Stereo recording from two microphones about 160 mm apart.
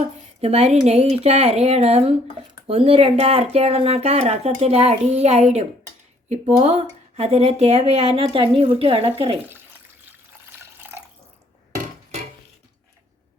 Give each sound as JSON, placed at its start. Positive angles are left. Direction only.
{"t": 0.0, "sound": "speech", "side_deg": -40}
{"t": 10.6, "sound": "water", "side_deg": -15}